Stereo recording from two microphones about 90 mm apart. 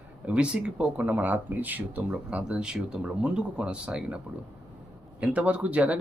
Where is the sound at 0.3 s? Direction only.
15° right (ahead or behind).